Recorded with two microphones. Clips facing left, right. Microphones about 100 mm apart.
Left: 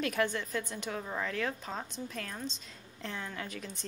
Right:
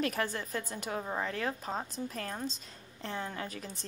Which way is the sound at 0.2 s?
35° right (ahead or behind).